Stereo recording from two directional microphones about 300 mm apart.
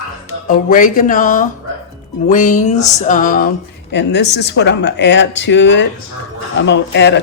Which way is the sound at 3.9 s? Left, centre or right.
Left.